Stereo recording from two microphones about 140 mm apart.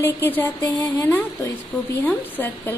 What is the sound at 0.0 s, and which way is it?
Speech, 15° left (ahead or behind).